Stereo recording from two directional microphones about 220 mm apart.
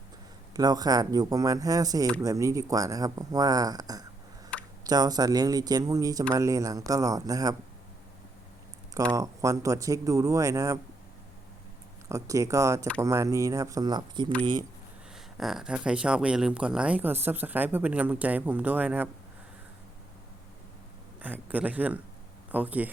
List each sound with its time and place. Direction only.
0.5 s speech: 15° right (ahead or behind)
9.1 s speech: 15° right (ahead or behind)
12.0 s speech: 15° right (ahead or behind)
15.1 s speech: centre (ahead or behind)
21.2 s speech: 5° right (ahead or behind)